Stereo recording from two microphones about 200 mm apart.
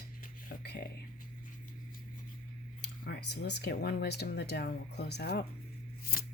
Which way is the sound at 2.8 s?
55° left (ahead or behind).